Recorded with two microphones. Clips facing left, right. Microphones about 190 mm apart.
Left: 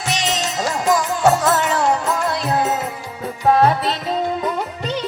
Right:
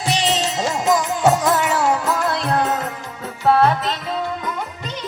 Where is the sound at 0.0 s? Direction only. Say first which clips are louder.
Right 2 dB; 35° right (ahead or behind); by 3.9 s 10° left (ahead or behind).